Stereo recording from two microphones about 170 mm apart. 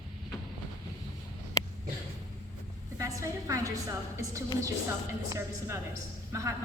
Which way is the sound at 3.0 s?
20° right (ahead or behind).